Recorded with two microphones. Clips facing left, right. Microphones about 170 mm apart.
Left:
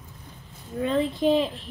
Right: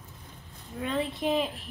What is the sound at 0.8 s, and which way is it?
Speech, 35° left (ahead or behind).